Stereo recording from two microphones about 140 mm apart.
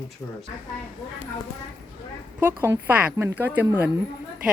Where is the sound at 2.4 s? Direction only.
15° right (ahead or behind).